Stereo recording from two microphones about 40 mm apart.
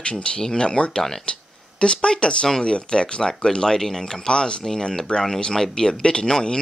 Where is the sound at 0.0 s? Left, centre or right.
Left.